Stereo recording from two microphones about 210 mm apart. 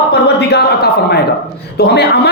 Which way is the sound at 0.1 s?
50° left (ahead or behind).